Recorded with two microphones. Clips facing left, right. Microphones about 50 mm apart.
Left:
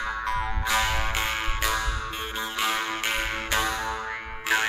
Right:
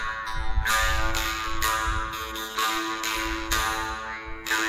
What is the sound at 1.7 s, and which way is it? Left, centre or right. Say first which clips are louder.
Music: right 4 dB; right.